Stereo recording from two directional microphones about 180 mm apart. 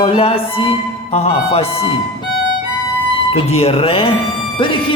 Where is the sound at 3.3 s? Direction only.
30° left (ahead or behind).